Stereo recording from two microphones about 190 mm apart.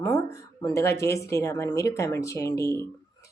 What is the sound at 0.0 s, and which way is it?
A woman's voice, 15° left (ahead or behind).